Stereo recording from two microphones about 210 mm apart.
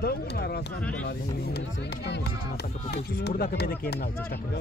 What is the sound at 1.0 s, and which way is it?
Speech, 50° left (ahead or behind).